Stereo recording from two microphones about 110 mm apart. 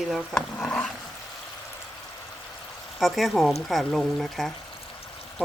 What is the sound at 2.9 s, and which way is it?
Speech, centre (ahead or behind).